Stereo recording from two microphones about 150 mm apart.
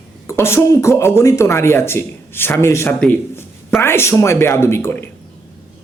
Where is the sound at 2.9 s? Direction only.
5° left (ahead or behind).